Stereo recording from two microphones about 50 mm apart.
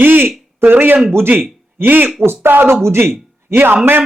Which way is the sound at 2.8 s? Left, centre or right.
Right.